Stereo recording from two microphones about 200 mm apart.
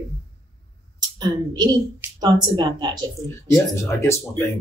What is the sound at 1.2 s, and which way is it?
Speech, 20° right (ahead or behind).